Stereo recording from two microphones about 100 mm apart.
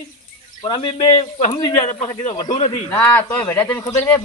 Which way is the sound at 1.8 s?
90° left.